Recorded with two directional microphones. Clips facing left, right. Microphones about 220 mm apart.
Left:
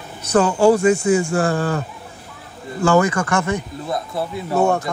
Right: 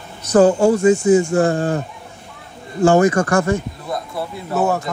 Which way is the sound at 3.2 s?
45° right (ahead or behind).